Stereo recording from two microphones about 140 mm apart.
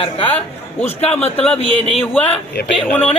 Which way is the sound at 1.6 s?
45° left (ahead or behind).